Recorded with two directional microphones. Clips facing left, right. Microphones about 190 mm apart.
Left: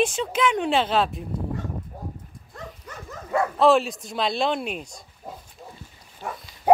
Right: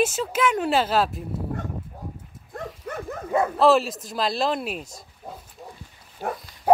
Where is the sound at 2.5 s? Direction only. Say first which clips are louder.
Right 7 dB; 55° right (ahead or behind).